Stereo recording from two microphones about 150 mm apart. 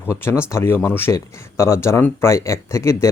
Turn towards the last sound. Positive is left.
turn(degrees=20)  # may be behind; listen again after turning